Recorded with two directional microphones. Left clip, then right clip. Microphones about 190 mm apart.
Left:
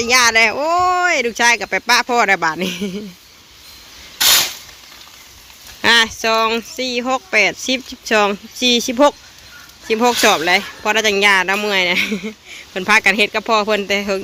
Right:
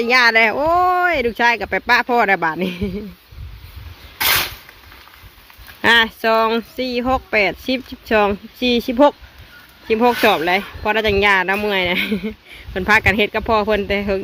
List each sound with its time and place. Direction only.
0.0 s speech: 15° right (ahead or behind)
4.2 s a sound: 25° left (ahead or behind)
5.8 s speech: 10° right (ahead or behind)